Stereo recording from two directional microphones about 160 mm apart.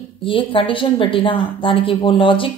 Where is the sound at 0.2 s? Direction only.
35° left (ahead or behind).